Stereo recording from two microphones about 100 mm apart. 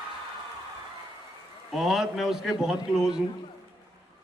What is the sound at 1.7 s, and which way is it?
A man's voice, 5° right (ahead or behind).